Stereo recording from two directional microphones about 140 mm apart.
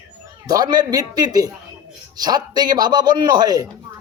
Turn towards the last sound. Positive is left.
turn(degrees=-25)  # may be behind; listen again after turning